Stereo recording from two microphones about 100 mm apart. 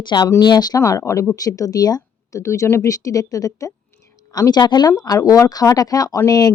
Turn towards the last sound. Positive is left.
turn(degrees=40)  # may be behind; listen again after turning